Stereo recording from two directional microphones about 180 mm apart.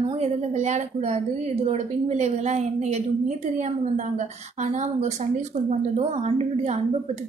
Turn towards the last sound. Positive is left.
turn(degrees=-35)  # may be behind; listen again after turning